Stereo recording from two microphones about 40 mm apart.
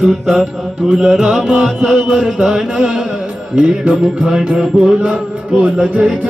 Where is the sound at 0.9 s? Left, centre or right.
Centre.